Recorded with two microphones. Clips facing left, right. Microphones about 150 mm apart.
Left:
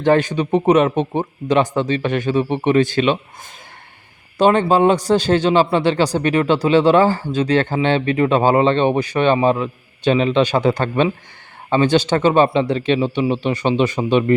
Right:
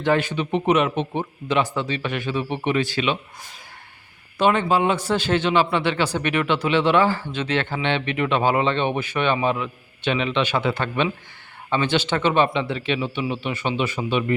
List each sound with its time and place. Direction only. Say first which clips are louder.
0.0 s a man's voice: left 6 dB; 45° left (ahead or behind)
4.4 s speech: left 5 dB; 40° left (ahead or behind)